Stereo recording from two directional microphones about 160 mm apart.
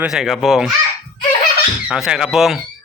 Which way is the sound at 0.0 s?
Centre (ahead or behind).